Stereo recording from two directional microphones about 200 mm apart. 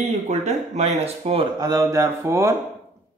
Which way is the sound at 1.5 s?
20° right (ahead or behind).